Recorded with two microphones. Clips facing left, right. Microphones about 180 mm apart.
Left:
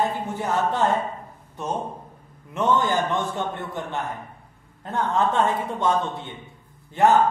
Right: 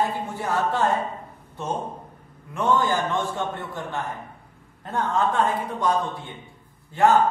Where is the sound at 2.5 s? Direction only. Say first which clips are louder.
Left 1 dB; 20° left (ahead or behind).